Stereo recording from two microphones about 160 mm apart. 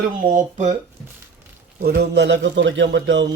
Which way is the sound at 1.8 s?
75° right (ahead or behind).